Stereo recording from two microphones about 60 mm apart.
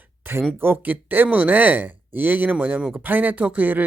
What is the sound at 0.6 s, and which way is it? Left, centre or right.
Speech, right.